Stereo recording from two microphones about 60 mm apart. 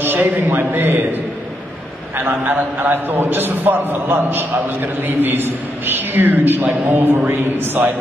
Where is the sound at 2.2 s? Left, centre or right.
Right.